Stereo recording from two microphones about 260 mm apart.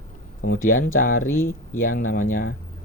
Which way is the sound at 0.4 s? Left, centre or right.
Left.